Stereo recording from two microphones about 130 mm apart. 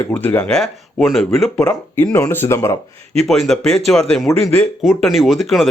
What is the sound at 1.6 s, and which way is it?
Speech, 20° left (ahead or behind).